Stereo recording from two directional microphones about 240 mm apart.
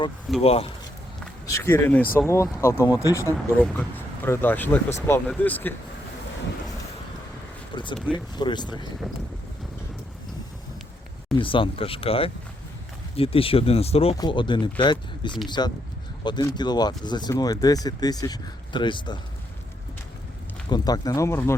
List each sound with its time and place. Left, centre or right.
0.4 s speech: left
1.2 s speech: centre
7.9 s speech: centre
8.4 s speech: centre
11.3 s speech: left
20.7 s speech: centre